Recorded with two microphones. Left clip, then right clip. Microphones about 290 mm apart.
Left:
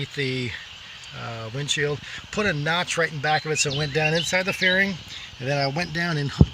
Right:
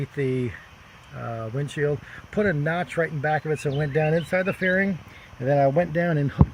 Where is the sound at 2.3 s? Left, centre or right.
Centre.